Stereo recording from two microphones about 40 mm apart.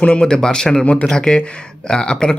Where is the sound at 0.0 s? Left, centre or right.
Left.